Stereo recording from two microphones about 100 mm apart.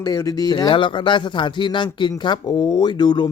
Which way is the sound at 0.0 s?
35° left (ahead or behind).